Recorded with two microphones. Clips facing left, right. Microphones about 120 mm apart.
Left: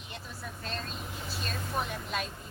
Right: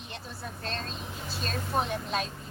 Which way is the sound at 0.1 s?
30° right (ahead or behind).